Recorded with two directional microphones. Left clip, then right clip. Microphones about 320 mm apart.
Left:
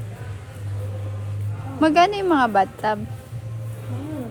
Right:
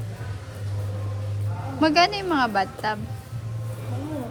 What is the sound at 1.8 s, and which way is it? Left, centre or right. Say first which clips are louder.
Speech: left 3 dB; centre.